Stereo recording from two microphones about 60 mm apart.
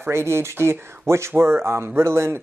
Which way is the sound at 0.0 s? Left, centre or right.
Right.